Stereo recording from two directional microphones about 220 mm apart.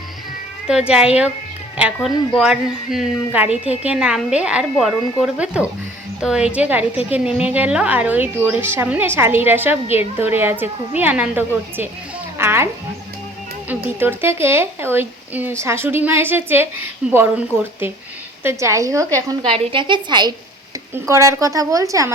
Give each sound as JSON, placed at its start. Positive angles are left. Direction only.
{"t": 0.7, "sound": "a woman's voice", "side_deg": -5}
{"t": 13.7, "sound": "a woman's voice", "side_deg": -10}